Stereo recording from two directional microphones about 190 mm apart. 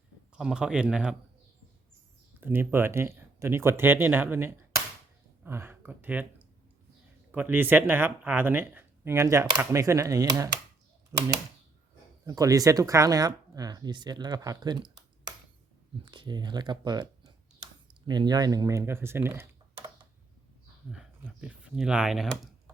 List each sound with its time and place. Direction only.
0.3 s speech: 5° right (ahead or behind)
2.4 s speech: 10° right (ahead or behind)
7.3 s speech: 10° right (ahead or behind)
12.2 s speech: 20° right (ahead or behind)
16.0 s speech: 25° right (ahead or behind)
20.9 s speech: 5° right (ahead or behind)